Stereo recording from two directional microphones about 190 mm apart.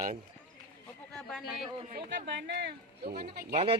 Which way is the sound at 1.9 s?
65° right (ahead or behind).